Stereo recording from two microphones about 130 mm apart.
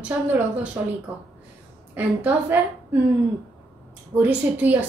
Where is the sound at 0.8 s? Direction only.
15° right (ahead or behind).